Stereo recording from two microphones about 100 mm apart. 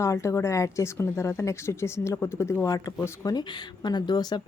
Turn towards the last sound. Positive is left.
turn(degrees=45)  # may be behind; listen again after turning